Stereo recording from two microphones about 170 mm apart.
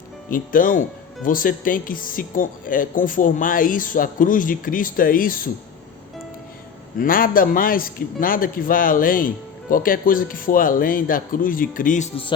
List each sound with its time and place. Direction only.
0.3 s speech: 55° left (ahead or behind)
7.0 s a man's voice: 55° left (ahead or behind); by 12.3 s 35° left (ahead or behind)